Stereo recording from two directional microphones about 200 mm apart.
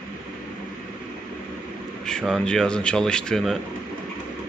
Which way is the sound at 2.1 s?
Centre (ahead or behind).